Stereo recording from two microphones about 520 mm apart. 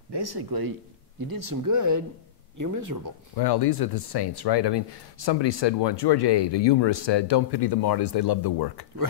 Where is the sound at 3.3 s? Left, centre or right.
Left.